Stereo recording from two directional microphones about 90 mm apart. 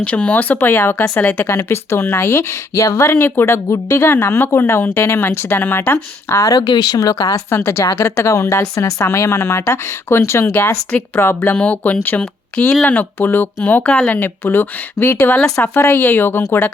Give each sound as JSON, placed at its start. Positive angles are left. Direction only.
{"t": 0.0, "sound": "speech", "side_deg": 15}
{"t": 6.6, "sound": "speech", "side_deg": 55}
{"t": 7.3, "sound": "a woman's voice", "side_deg": 25}